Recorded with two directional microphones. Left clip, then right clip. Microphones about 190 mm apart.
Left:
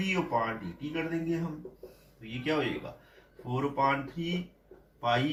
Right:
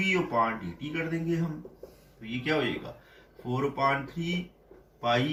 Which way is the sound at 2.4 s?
15° left (ahead or behind).